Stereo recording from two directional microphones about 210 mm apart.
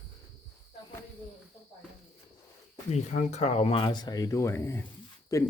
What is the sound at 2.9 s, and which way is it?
Speech, 30° left (ahead or behind).